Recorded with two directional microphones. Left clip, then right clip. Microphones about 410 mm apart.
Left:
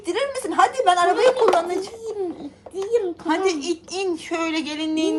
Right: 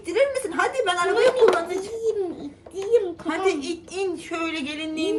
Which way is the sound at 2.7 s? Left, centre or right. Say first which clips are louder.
Right 1 dB; centre.